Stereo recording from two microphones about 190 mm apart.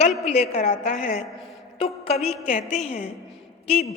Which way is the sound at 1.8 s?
30° left (ahead or behind).